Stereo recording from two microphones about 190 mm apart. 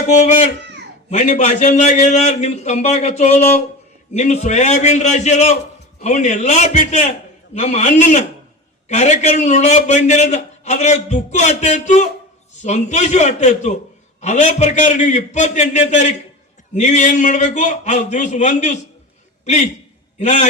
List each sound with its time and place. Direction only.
0.1 s a man's voice: 35° left (ahead or behind)